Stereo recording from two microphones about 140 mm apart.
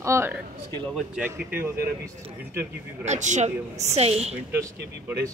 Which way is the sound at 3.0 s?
55° right (ahead or behind).